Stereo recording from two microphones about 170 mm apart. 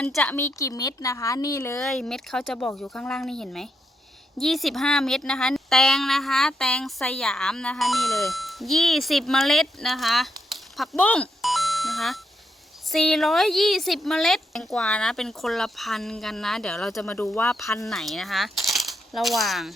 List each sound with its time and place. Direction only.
0.0 s a woman's voice: 5° left (ahead or behind)
1.8 s speech: centre (ahead or behind)
17.8 s speech: centre (ahead or behind)